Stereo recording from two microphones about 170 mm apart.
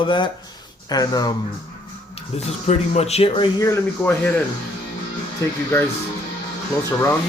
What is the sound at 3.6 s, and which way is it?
Speech, 15° left (ahead or behind).